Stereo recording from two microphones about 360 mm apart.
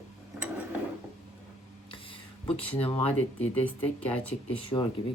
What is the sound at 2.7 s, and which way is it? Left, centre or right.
Speech, centre.